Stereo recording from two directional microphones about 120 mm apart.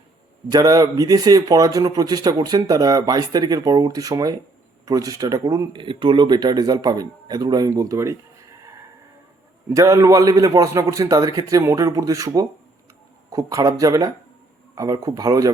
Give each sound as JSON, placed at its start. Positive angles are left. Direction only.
{"t": 0.5, "sound": "a man's voice", "side_deg": -30}
{"t": 5.8, "sound": "a man's voice", "side_deg": -45}
{"t": 9.6, "sound": "a man's voice", "side_deg": -25}